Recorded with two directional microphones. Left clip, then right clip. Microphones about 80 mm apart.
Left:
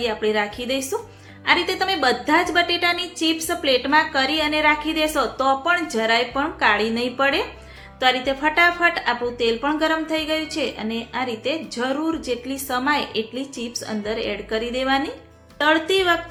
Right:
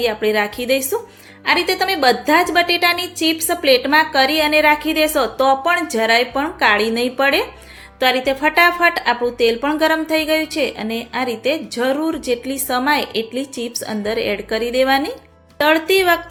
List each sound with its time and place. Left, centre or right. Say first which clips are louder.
0.0 s a woman's voice: right 4 dB; right
15.5 s speech: right 4 dB; right